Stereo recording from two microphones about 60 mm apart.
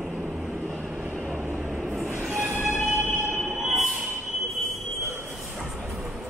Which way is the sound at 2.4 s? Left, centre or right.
Right.